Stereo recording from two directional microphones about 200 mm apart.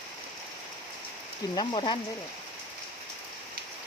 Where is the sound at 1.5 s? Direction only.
25° left (ahead or behind).